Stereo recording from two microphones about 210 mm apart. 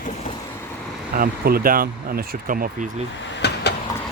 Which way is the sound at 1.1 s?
45° right (ahead or behind).